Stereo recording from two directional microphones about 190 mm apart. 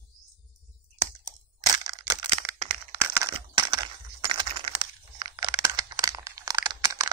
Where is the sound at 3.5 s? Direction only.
20° right (ahead or behind).